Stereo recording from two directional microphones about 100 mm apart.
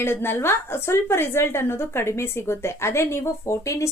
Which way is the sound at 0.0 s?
25° left (ahead or behind).